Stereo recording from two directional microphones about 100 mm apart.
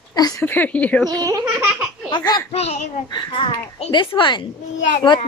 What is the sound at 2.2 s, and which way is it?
Speech, 40° left (ahead or behind).